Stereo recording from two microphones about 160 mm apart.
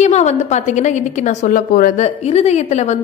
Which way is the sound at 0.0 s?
45° left (ahead or behind).